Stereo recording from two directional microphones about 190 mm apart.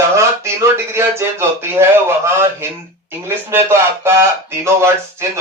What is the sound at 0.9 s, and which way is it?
Speech, 10° right (ahead or behind).